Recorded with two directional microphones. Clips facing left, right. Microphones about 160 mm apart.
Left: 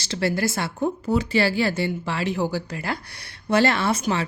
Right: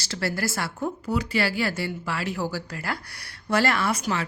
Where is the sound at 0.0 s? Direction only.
20° left (ahead or behind).